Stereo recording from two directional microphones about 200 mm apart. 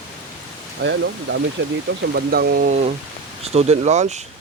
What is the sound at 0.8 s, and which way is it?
Speech, 60° right (ahead or behind).